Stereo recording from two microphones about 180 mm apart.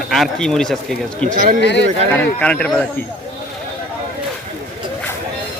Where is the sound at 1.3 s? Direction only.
45° right (ahead or behind).